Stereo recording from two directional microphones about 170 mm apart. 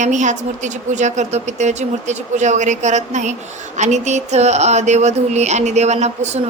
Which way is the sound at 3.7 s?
45° right (ahead or behind).